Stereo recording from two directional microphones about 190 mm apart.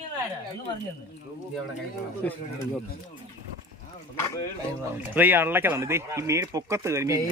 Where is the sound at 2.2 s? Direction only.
5° left (ahead or behind).